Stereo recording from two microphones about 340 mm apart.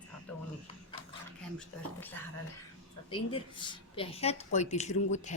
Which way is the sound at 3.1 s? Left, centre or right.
Centre.